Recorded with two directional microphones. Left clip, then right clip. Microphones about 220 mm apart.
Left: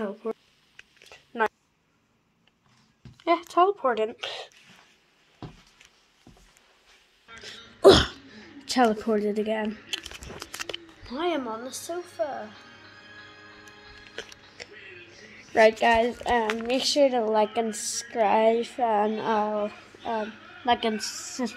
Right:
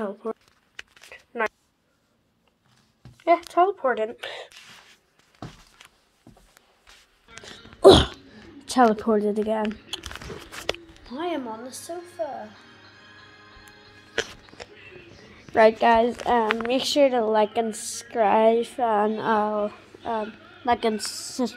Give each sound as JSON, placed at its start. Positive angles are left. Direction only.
{"t": 0.0, "sound": "a woman's voice", "side_deg": 5}
{"t": 3.3, "sound": "a woman's voice", "side_deg": 5}
{"t": 7.8, "sound": "a sound", "side_deg": 5}
{"t": 8.6, "sound": "speech", "side_deg": 10}
{"t": 11.1, "sound": "a woman's voice", "side_deg": 15}
{"t": 14.6, "sound": "a sound", "side_deg": 5}
{"t": 15.5, "sound": "a woman's voice", "side_deg": 5}